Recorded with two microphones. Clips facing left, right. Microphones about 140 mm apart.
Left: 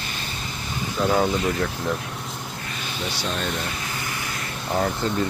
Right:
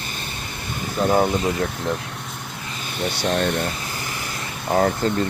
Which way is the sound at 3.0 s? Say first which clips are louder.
Right 7 dB; 60° right (ahead or behind).